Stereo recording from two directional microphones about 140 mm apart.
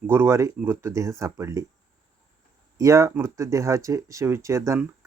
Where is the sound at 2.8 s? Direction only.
20° right (ahead or behind).